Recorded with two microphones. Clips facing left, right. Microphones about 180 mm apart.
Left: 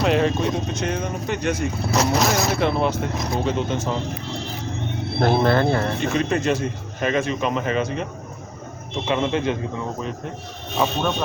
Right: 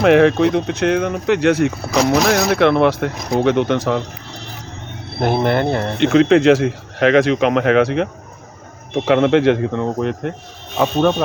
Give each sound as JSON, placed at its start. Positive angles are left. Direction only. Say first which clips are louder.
{"t": 0.0, "sound": "speech", "louder": "right 8 dB", "side_deg": -70}
{"t": 5.2, "sound": "speech", "louder": "right 2 dB", "side_deg": -15}
{"t": 6.0, "sound": "speech", "louder": "right 10 dB", "side_deg": -75}